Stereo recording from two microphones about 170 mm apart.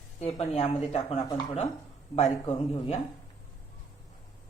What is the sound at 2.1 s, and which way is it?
Speech, 35° left (ahead or behind).